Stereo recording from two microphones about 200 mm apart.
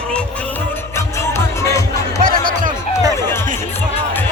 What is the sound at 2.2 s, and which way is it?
Music, 45° right (ahead or behind).